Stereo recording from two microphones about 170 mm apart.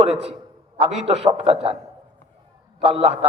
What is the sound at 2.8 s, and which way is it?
Speech, 35° right (ahead or behind).